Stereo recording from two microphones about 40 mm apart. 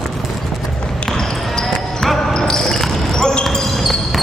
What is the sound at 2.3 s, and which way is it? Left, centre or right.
Basketball bounce, centre.